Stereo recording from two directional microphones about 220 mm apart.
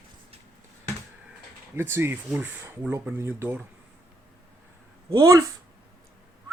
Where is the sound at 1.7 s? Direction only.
10° right (ahead or behind).